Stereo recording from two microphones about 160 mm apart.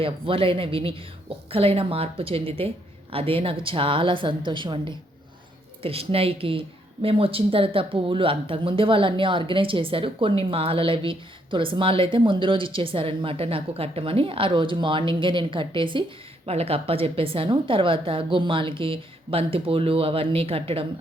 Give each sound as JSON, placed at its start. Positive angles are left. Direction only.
{"t": 0.0, "sound": "a woman's voice", "side_deg": -35}